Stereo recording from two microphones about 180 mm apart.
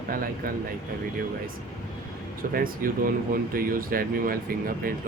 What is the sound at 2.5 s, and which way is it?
Speech, 50° right (ahead or behind).